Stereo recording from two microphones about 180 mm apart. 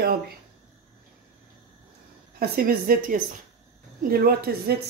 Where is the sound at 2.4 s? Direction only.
55° right (ahead or behind).